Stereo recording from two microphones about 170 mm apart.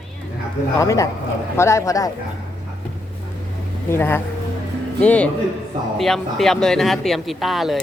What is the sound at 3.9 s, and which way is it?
A woman's voice, 15° left (ahead or behind).